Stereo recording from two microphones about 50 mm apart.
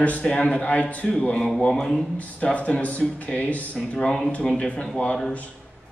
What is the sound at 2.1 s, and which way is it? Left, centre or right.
A man's voice, left.